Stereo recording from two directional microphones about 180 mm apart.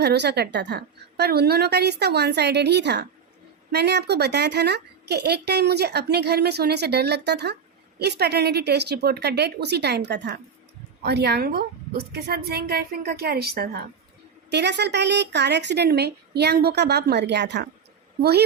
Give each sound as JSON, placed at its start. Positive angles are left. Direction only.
{"t": 0.0, "sound": "a woman's voice", "side_deg": -65}
{"t": 14.5, "sound": "a woman's voice", "side_deg": -70}